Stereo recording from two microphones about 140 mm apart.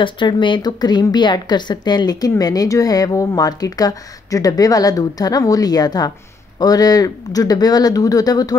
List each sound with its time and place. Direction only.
0.0 s a woman's voice: 35° left (ahead or behind)